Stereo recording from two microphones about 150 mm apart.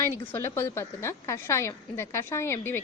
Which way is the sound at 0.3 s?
15° left (ahead or behind).